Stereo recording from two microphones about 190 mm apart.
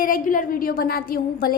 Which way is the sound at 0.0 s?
45° left (ahead or behind).